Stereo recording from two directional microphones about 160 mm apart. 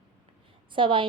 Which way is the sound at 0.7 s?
30° right (ahead or behind).